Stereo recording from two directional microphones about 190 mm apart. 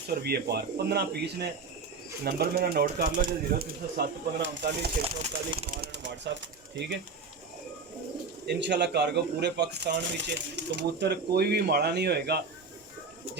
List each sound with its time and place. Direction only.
0.1 s speech: 55° right (ahead or behind)
4.4 s speech: 65° right (ahead or behind)
5.0 s speech: 30° right (ahead or behind)
5.7 s speech: 60° right (ahead or behind)
8.4 s speech: 65° right (ahead or behind)